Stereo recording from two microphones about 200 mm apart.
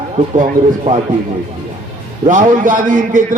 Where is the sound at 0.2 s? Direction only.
35° right (ahead or behind).